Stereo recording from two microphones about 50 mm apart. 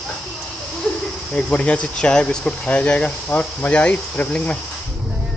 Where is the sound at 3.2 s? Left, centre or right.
Left.